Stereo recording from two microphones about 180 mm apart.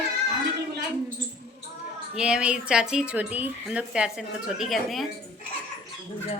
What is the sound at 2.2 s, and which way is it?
Speech, 5° right (ahead or behind).